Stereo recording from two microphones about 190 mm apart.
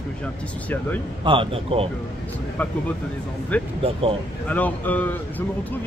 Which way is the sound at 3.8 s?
30° right (ahead or behind).